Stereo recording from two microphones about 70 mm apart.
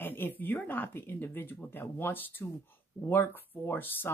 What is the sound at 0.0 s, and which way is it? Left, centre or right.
Speech, left.